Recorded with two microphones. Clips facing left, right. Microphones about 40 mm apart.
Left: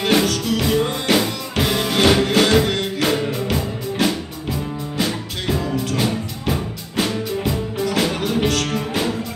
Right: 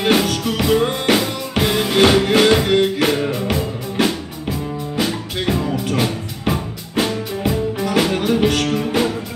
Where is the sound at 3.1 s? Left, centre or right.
Centre.